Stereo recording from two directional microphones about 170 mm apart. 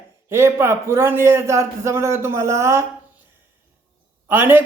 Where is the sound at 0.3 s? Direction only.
15° right (ahead or behind).